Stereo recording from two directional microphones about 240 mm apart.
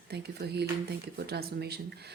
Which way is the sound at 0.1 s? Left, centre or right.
Right.